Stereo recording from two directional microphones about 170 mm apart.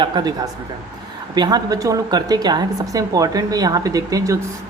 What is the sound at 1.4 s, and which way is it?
A woman's voice, 25° right (ahead or behind).